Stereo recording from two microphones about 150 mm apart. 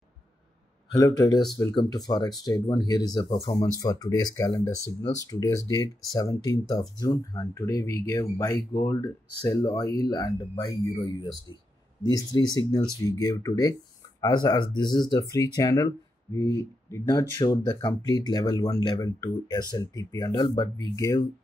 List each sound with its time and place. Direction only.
0.9 s speech: 25° left (ahead or behind)